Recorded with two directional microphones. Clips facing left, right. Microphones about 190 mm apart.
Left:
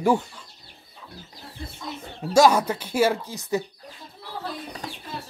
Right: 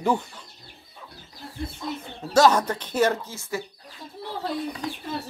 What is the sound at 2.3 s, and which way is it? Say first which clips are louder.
Speech: left 1 dB; 10° left (ahead or behind).